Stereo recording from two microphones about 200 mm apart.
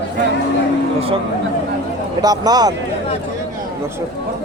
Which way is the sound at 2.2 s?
20° right (ahead or behind).